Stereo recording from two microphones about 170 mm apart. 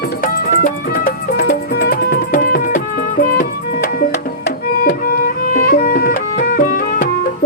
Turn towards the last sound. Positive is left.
turn(degrees=55)  # may be behind; listen again after turning